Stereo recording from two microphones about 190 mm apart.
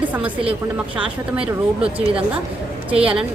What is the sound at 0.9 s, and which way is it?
Speech, 5° right (ahead or behind).